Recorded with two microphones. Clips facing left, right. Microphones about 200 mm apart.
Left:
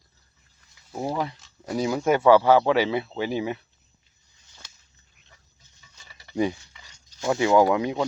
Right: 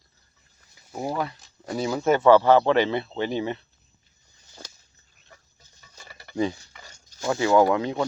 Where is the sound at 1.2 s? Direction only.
20° left (ahead or behind).